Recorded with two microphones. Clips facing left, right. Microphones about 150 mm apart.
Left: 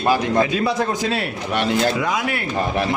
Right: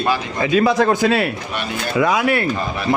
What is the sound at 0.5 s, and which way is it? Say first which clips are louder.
A man's voice: right 6 dB; 85° right.